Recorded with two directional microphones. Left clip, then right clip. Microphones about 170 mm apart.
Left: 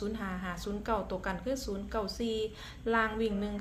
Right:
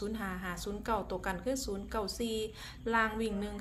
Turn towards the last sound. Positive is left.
turn(degrees=-10)  # may be behind; listen again after turning